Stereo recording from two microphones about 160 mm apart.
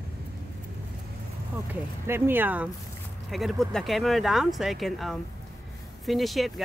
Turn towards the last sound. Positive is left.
turn(degrees=0)  # may be behind; listen again after turning